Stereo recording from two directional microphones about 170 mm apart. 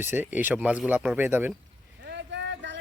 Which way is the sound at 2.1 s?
85° right.